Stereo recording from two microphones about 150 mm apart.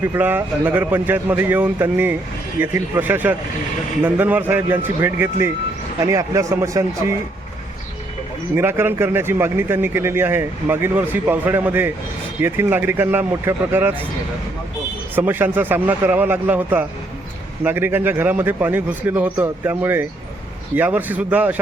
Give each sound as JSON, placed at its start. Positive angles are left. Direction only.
{"t": 0.0, "sound": "a man's voice", "side_deg": -15}
{"t": 8.5, "sound": "a man's voice", "side_deg": -15}
{"t": 15.1, "sound": "a man's voice", "side_deg": -15}